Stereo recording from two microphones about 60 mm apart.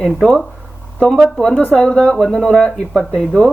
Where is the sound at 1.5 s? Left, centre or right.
Left.